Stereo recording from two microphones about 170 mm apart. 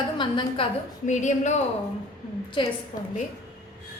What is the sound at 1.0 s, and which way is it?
Speech, 45° left (ahead or behind).